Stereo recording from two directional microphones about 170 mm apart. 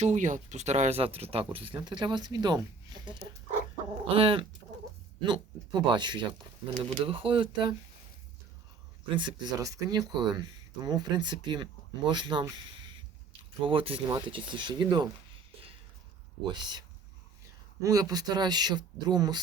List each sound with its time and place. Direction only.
0.0 s speech: 45° right (ahead or behind); by 7.8 s 30° right (ahead or behind)
9.0 s speech: 25° right (ahead or behind)
13.6 s speech: 30° right (ahead or behind)
16.5 s speech: 25° right (ahead or behind)
17.8 s speech: 20° right (ahead or behind)